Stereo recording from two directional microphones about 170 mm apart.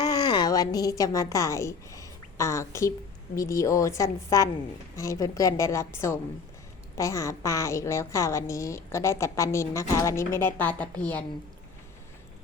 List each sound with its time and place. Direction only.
0.0 s a woman's voice: 25° left (ahead or behind); by 11.3 s 10° left (ahead or behind)